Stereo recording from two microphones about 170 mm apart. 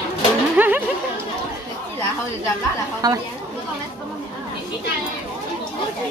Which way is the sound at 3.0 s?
25° right (ahead or behind).